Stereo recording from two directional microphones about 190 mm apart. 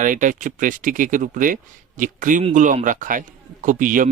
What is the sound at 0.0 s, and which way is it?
A man's voice, 45° right (ahead or behind).